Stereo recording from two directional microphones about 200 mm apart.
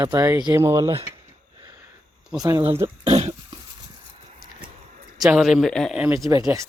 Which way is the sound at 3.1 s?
35° right (ahead or behind).